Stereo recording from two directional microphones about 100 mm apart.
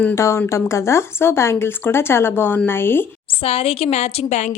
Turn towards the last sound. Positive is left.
turn(degrees=90)